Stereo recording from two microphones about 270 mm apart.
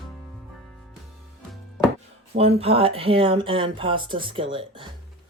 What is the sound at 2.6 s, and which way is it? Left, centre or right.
Speech, right.